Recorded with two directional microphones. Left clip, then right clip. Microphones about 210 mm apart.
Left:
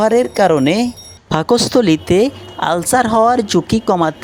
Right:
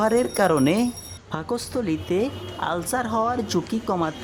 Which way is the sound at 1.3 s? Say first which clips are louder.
Left 15 dB; 30° left (ahead or behind).